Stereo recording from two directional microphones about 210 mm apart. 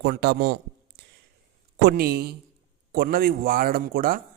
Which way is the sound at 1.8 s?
50° right (ahead or behind).